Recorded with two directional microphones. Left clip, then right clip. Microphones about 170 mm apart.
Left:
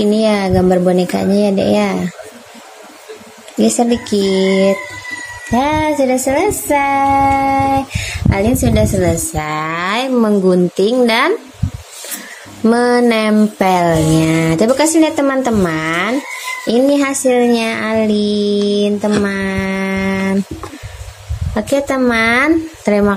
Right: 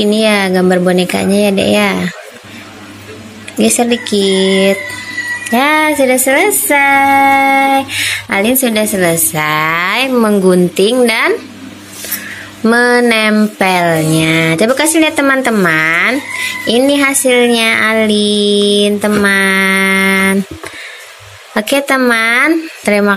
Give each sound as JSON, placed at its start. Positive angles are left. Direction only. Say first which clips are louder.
{"t": 0.0, "sound": "speech", "louder": "right 3 dB", "side_deg": 10}
{"t": 3.7, "sound": "speech", "louder": "right 2 dB", "side_deg": 10}
{"t": 12.6, "sound": "speech", "louder": "right 3 dB", "side_deg": 15}
{"t": 21.5, "sound": "speech", "louder": "right 3 dB", "side_deg": 10}